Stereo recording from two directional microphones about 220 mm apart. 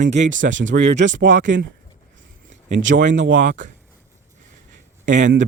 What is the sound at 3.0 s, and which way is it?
Speech, 55° right (ahead or behind).